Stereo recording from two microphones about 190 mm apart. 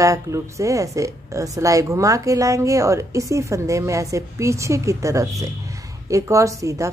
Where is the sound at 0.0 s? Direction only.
15° right (ahead or behind).